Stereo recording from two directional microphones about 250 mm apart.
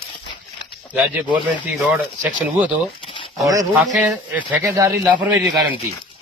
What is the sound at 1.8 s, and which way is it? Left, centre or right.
Speech, centre.